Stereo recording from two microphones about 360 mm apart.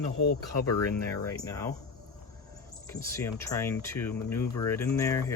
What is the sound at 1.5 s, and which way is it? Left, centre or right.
Speech, centre.